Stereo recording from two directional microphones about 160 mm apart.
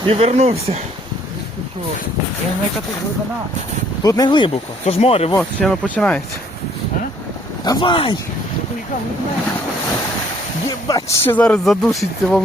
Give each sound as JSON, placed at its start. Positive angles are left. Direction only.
{"t": 0.0, "sound": "speech", "side_deg": -40}
{"t": 4.0, "sound": "speech", "side_deg": 25}
{"t": 5.4, "sound": "speech", "side_deg": 5}
{"t": 7.6, "sound": "speech", "side_deg": 25}
{"t": 10.8, "sound": "speech", "side_deg": 20}